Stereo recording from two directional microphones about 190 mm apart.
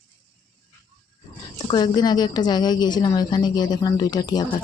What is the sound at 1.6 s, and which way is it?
A woman's voice, 25° left (ahead or behind).